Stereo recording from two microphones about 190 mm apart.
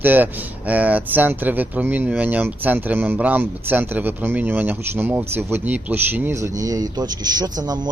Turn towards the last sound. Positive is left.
turn(degrees=-20)  # may be behind; listen again after turning